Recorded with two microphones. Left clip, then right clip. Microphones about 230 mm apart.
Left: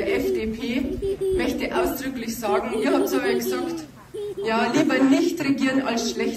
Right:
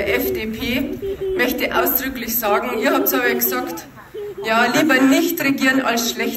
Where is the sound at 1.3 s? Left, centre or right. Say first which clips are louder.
Right 5 dB; right.